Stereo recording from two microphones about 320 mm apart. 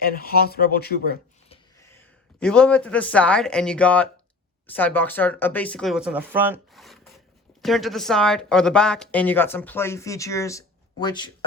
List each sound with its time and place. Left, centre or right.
0.0 s speech: left
1.8 s speech: centre